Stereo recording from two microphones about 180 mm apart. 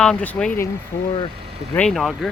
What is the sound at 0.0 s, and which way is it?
Speech, 5° left (ahead or behind).